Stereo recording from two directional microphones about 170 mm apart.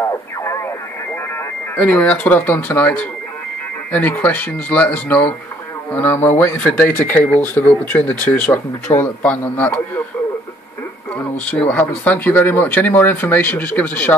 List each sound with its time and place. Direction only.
0.0 s radio: 15° left (ahead or behind)
1.8 s speech: 10° left (ahead or behind)
11.1 s speech: 10° left (ahead or behind)